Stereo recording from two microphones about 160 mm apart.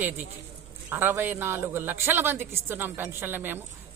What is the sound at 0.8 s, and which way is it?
A man's voice, 15° right (ahead or behind).